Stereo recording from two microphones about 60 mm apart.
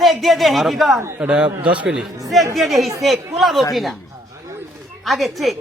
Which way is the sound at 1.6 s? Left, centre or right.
Right.